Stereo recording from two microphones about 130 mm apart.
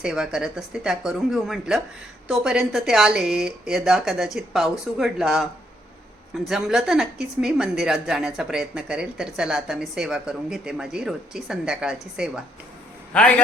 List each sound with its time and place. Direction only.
0.0 s a woman's voice: 5° right (ahead or behind)
13.1 s a man's voice: 10° left (ahead or behind)